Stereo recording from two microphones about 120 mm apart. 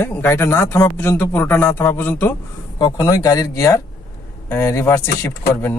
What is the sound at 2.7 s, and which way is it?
Speech, 30° left (ahead or behind).